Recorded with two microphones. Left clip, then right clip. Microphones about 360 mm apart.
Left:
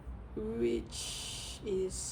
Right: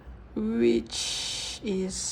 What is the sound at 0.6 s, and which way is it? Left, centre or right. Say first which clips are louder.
Speech: right 11 dB; right.